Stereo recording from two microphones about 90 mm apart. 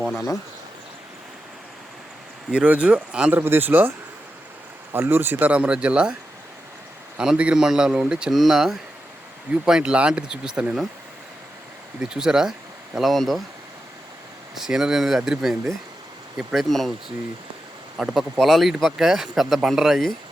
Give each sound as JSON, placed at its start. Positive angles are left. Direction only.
{"t": 0.0, "sound": "speech", "side_deg": -5}
{"t": 2.5, "sound": "speech", "side_deg": -15}
{"t": 3.3, "sound": "speech", "side_deg": -25}
{"t": 7.2, "sound": "speech", "side_deg": -10}
{"t": 11.9, "sound": "speech", "side_deg": -5}
{"t": 14.5, "sound": "speech", "side_deg": -5}
{"t": 17.9, "sound": "speech", "side_deg": -5}